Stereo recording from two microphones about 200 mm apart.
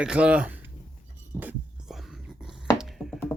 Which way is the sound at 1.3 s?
10° right (ahead or behind).